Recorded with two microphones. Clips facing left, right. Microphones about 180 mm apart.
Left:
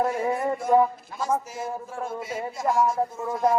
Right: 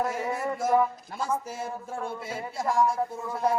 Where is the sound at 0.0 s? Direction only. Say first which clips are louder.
Left 4 dB; 40° left (ahead or behind).